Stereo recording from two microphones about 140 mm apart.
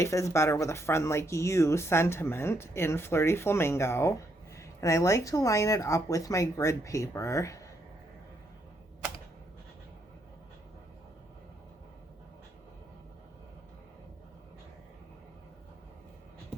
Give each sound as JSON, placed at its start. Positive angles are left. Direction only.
{"t": 0.0, "sound": "speech", "side_deg": 20}